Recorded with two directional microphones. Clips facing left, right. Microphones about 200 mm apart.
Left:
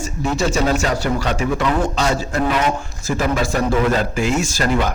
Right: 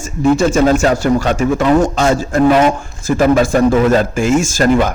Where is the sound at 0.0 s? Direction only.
50° right (ahead or behind).